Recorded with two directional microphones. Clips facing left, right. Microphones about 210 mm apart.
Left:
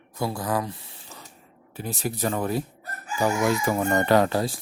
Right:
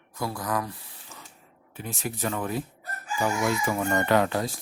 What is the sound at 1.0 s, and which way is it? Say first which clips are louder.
Spray: left 3 dB; 35° left (ahead or behind).